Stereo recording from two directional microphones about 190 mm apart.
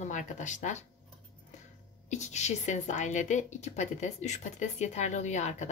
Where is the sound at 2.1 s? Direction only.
40° left (ahead or behind).